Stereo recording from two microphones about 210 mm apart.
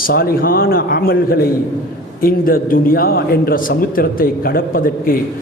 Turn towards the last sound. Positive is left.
turn(degrees=45)  # may be behind; listen again after turning